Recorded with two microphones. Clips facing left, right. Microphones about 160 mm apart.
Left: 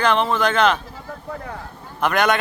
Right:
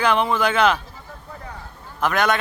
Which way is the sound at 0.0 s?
10° right (ahead or behind).